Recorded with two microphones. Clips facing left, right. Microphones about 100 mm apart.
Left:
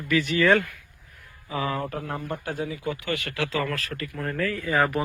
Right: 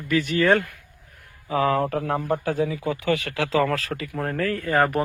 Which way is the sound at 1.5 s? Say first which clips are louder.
Right 7 dB; 65° right (ahead or behind).